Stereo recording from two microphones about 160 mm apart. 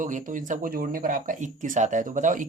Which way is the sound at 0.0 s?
55° right (ahead or behind).